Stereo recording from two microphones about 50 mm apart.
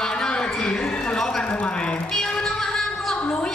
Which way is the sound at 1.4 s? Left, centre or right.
Left.